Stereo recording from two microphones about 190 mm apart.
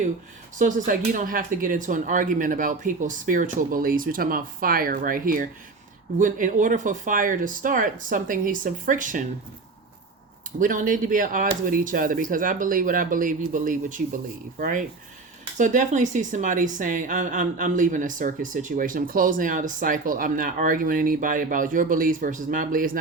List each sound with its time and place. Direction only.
0.6 s speech: 45° right (ahead or behind)
10.6 s speech: 45° right (ahead or behind)